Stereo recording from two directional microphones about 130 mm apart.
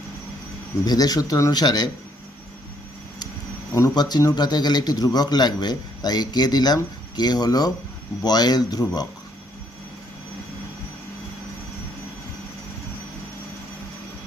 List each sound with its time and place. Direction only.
0.9 s a man's voice: 30° left (ahead or behind)
3.8 s a man's voice: 25° left (ahead or behind)